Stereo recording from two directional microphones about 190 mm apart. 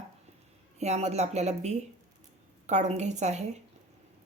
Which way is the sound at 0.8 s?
35° right (ahead or behind).